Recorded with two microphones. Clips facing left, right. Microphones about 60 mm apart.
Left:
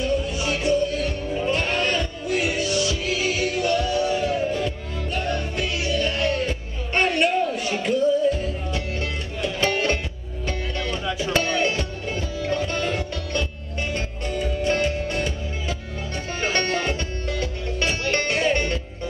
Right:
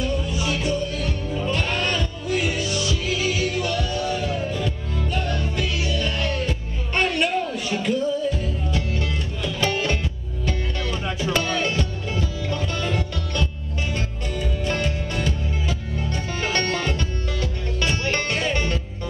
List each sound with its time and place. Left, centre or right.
0.0 s music: centre
11.3 s music: centre
16.3 s music: centre